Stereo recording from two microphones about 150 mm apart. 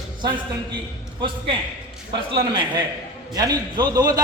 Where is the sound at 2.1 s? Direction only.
30° right (ahead or behind).